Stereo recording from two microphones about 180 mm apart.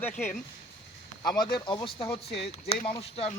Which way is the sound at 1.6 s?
30° left (ahead or behind).